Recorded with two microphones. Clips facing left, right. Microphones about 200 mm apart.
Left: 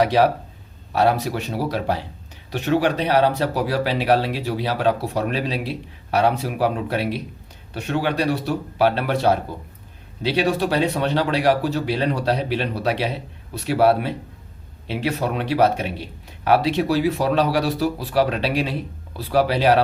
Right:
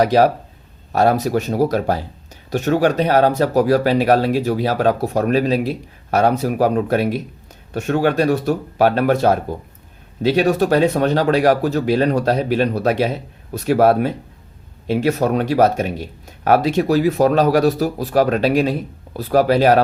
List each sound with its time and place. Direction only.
0.0 s speech: 40° right (ahead or behind)